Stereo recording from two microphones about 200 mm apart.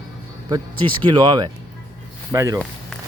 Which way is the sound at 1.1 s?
20° right (ahead or behind).